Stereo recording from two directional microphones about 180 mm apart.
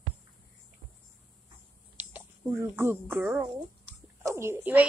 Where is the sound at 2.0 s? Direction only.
10° right (ahead or behind).